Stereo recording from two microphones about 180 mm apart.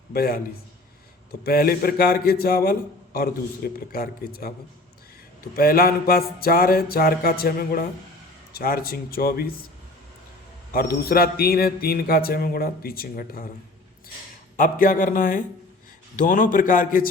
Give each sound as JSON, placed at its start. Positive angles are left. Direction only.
{"t": 0.1, "sound": "a man's voice", "side_deg": 55}
{"t": 5.5, "sound": "a man's voice", "side_deg": 55}
{"t": 10.7, "sound": "a man's voice", "side_deg": 55}
{"t": 14.5, "sound": "a man's voice", "side_deg": 50}